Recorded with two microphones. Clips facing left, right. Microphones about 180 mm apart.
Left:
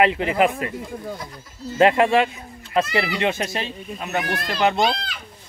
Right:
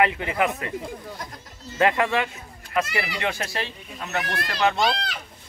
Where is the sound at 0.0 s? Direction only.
25° left (ahead or behind).